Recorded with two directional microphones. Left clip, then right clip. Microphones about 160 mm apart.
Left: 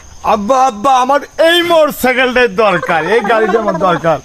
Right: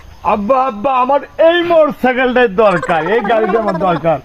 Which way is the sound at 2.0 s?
30° right (ahead or behind).